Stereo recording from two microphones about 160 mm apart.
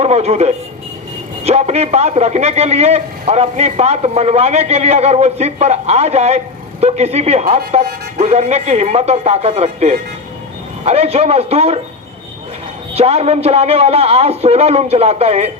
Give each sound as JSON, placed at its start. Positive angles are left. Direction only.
{"t": 0.0, "sound": "a man's voice", "side_deg": -40}
{"t": 12.9, "sound": "a man's voice", "side_deg": -40}